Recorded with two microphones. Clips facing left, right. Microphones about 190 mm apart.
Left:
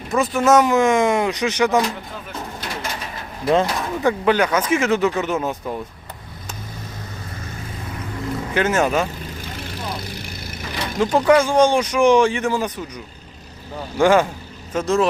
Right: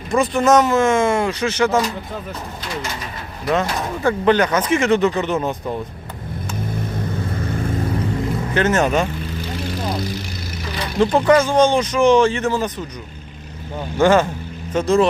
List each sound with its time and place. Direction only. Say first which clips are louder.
0.1 s speech: right 1 dB; 5° left (ahead or behind)
3.4 s speech: left 2 dB; 25° left (ahead or behind)
4.3 s speech: right 3 dB; 10° left (ahead or behind)
8.5 s speech: right 1 dB; 10° left (ahead or behind)
11.0 s speech: right 1 dB; 10° left (ahead or behind)
14.0 s speech: right 1 dB; 10° left (ahead or behind)
14.7 s speech: right 3 dB; centre (ahead or behind)